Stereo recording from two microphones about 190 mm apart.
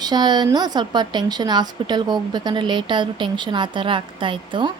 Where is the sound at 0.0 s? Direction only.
20° right (ahead or behind).